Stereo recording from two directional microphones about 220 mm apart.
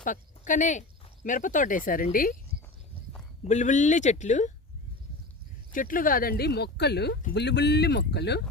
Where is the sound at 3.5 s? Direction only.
35° left (ahead or behind).